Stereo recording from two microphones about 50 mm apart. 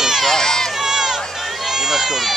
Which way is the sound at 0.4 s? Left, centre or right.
Centre.